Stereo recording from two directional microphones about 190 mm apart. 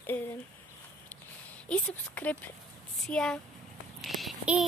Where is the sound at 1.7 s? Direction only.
10° left (ahead or behind).